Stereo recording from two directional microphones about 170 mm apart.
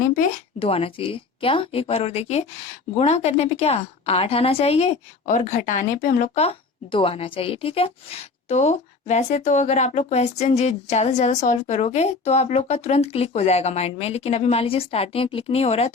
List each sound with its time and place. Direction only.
0.6 s a woman's voice: 35° left (ahead or behind)